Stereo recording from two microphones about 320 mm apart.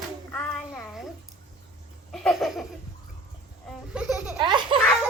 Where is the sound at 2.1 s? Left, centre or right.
Centre.